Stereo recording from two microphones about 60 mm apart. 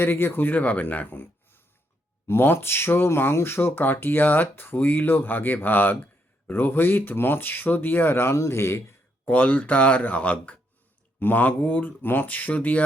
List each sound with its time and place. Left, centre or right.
0.0 s speech: left
9.2 s speech: left